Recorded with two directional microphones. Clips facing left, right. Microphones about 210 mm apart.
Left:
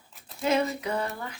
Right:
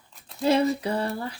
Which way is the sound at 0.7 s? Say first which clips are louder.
Right 3 dB; 35° right (ahead or behind).